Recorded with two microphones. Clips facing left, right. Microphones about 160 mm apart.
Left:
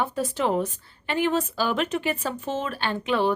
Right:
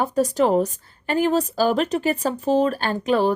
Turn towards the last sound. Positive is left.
turn(degrees=-40)  # may be behind; listen again after turning